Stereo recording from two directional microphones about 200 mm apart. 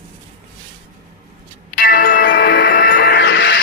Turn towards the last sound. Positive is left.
turn(degrees=60)  # may be behind; listen again after turning